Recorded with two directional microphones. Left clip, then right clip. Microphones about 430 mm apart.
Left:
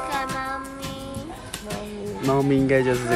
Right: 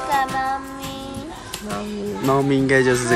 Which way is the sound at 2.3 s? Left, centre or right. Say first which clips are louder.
Right 2 dB; centre.